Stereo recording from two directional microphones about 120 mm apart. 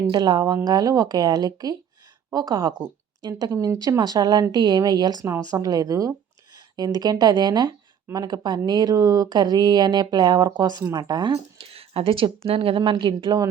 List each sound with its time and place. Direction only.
0.1 s speech: 35° right (ahead or behind)
11.5 s a sound: 50° right (ahead or behind)
12.5 s speech: 55° right (ahead or behind); by 13.5 s 35° right (ahead or behind)